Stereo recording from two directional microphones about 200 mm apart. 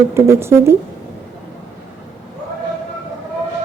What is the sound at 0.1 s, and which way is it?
Speech, 10° right (ahead or behind).